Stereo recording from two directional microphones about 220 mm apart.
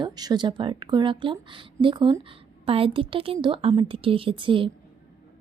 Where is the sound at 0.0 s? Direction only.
20° right (ahead or behind).